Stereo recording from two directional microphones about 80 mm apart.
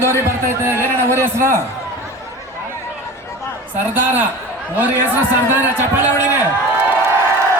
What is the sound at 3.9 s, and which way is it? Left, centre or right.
A man's voice, right.